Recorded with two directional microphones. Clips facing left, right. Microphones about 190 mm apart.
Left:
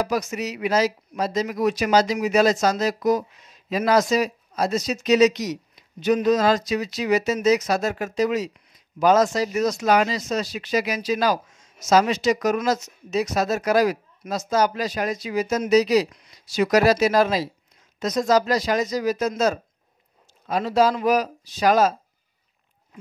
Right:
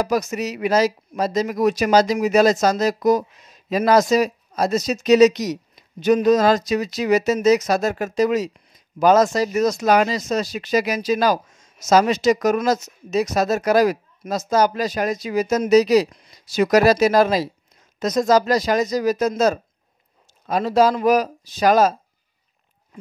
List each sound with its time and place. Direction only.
0.0 s speech: 45° right (ahead or behind)